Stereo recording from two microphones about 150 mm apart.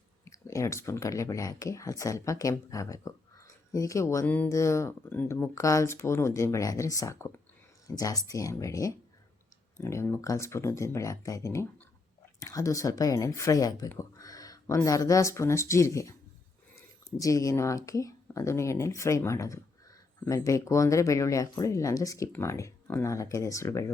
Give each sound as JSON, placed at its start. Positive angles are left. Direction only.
{"t": 0.3, "sound": "speech", "side_deg": 20}
{"t": 13.9, "sound": "a sound", "side_deg": 20}
{"t": 14.8, "sound": "speech", "side_deg": 20}